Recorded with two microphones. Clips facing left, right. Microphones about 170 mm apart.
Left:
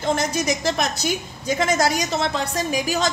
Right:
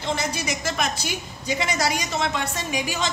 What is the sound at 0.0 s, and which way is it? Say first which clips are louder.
A woman's voice: left 5 dB; 45° left (ahead or behind).